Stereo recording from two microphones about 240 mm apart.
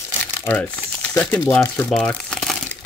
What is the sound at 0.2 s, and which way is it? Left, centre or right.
Crumpling, centre.